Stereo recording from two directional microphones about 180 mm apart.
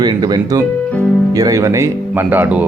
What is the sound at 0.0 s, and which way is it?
Speech, 25° right (ahead or behind).